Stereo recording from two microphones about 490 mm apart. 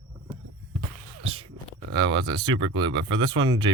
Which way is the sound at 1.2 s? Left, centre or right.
Centre.